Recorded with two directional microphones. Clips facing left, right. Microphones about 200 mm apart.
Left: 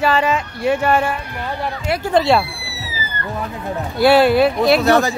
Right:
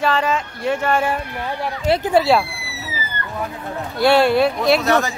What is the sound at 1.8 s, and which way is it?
Speech, 25° right (ahead or behind).